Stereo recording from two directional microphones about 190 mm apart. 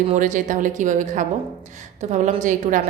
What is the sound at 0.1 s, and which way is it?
A woman's voice, 40° right (ahead or behind).